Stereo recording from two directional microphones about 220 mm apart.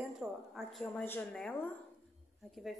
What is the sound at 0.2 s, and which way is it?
A woman's voice, centre (ahead or behind).